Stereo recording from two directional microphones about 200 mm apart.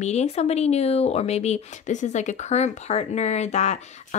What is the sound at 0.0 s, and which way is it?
Speech, 35° left (ahead or behind).